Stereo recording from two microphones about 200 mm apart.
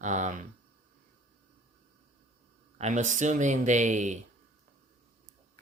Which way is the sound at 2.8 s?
35° right (ahead or behind).